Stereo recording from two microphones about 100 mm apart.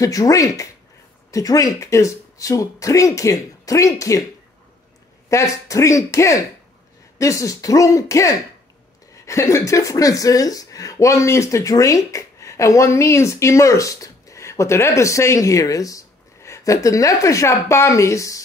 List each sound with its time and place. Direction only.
0.0 s speech: 35° left (ahead or behind)
5.3 s speech: 30° left (ahead or behind)